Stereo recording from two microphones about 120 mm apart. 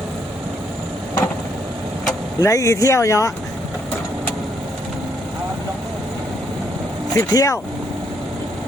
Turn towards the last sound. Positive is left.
turn(degrees=25)  # may be behind; listen again after turning